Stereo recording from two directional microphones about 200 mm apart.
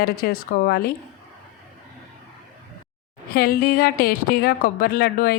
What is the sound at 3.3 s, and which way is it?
A woman's voice, 50° left (ahead or behind).